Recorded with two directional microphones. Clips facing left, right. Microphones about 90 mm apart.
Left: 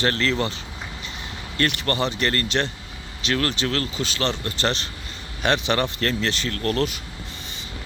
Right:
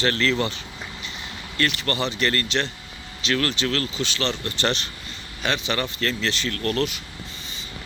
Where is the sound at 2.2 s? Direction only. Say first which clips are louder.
Left 1 dB; 30° left (ahead or behind).